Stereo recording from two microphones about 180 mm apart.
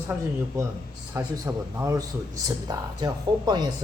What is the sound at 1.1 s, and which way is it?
A man's voice, 15° right (ahead or behind).